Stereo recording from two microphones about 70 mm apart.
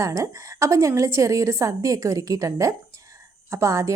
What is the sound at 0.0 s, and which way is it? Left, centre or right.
Speech, right.